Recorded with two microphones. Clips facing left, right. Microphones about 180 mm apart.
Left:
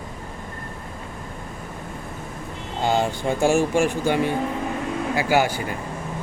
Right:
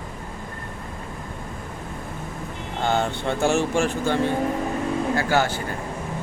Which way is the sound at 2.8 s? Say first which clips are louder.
Left 2 dB; 10° left (ahead or behind).